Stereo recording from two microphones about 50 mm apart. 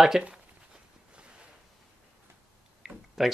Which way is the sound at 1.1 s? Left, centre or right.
Right.